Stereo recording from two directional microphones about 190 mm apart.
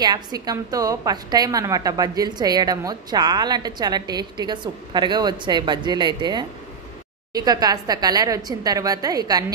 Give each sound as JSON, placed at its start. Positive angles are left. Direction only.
{"t": 0.0, "sound": "a woman's voice", "side_deg": -20}